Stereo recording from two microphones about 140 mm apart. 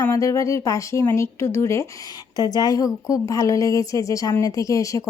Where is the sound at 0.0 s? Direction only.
20° left (ahead or behind).